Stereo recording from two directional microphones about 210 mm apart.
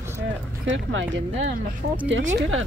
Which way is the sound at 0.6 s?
60° right (ahead or behind).